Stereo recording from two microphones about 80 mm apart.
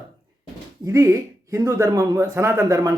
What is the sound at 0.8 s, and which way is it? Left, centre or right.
Speech, right.